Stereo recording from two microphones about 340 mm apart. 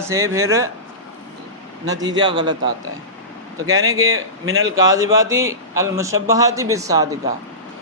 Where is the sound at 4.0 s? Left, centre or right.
Right.